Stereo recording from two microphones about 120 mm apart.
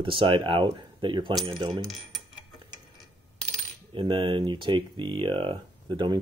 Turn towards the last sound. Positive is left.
turn(degrees=-40)  # may be behind; listen again after turning